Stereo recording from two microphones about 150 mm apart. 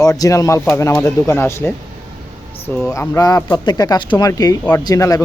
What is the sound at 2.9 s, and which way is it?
Speech, 20° left (ahead or behind).